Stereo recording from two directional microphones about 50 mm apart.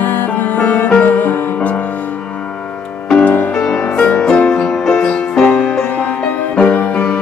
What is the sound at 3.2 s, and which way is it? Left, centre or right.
Music, left.